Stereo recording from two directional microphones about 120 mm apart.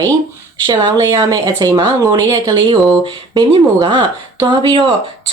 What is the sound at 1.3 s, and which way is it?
Speech, 35° right (ahead or behind).